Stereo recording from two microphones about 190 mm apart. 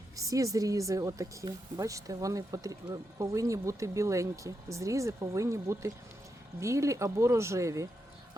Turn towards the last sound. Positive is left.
turn(degrees=-15)  # may be behind; listen again after turning